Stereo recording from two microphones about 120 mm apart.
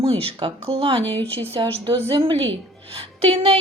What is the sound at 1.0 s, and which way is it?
Speech, 15° left (ahead or behind).